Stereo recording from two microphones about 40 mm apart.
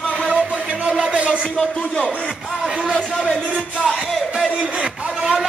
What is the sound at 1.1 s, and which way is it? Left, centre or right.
Speech, right.